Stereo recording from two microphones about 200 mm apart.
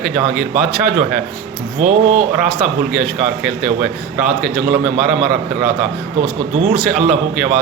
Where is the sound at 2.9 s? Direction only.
Centre (ahead or behind).